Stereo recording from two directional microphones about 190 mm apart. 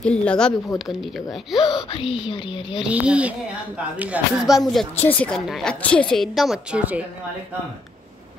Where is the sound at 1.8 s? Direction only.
30° left (ahead or behind).